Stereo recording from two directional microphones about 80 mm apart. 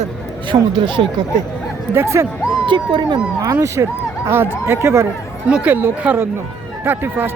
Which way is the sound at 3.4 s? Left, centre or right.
Right.